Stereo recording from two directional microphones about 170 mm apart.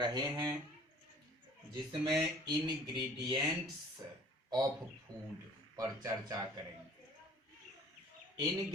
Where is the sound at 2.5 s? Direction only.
25° right (ahead or behind).